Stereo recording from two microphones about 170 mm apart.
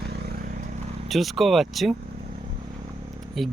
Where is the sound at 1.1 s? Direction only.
Centre (ahead or behind).